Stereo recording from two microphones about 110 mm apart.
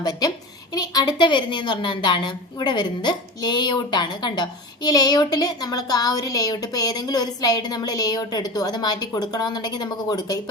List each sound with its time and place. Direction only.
0.0 s a woman's voice: 35° left (ahead or behind)